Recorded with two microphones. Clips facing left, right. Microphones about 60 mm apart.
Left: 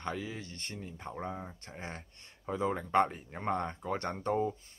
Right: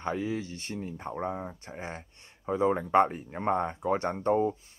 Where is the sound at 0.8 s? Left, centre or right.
Right.